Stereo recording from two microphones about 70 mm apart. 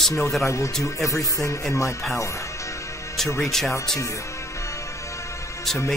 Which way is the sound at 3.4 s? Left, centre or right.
Centre.